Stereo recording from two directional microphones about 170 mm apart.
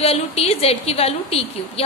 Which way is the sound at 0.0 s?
35° left (ahead or behind).